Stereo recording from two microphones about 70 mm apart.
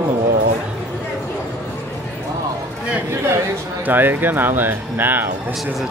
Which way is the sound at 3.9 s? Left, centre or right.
Right.